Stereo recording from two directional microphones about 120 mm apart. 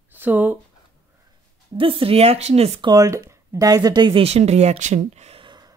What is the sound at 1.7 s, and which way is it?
Speech, 45° right (ahead or behind).